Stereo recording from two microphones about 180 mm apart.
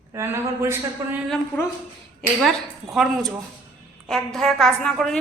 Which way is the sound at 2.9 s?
Centre (ahead or behind).